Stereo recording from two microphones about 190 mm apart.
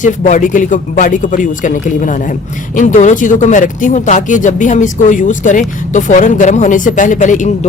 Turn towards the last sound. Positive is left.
turn(degrees=40)  # may be behind; listen again after turning